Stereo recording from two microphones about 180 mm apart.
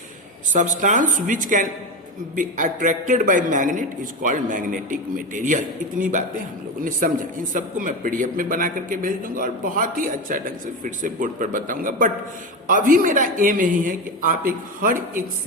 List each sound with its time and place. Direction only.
0.5 s a man's voice: 45° right (ahead or behind)